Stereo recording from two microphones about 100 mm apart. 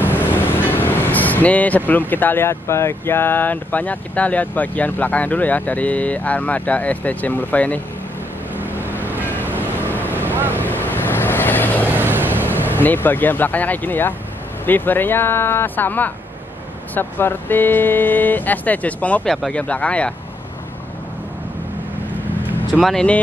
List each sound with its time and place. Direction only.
0.1 s speech: 20° left (ahead or behind)
8.5 s vehicle: 20° right (ahead or behind)
9.6 s vehicle: 20° left (ahead or behind)
10.1 s vehicle: 20° right (ahead or behind)
10.6 s vehicle: 20° left (ahead or behind)
11.9 s vehicle: 20° right (ahead or behind)
12.7 s speech: 20° left (ahead or behind)
19.2 s speech: 5° left (ahead or behind)
22.8 s speech: centre (ahead or behind)